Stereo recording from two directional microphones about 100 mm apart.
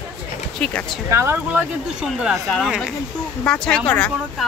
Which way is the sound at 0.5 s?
10° left (ahead or behind).